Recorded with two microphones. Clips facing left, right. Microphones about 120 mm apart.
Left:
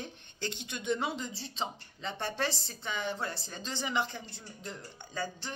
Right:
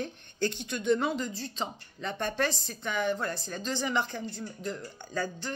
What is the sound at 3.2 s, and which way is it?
Speech, 55° right (ahead or behind).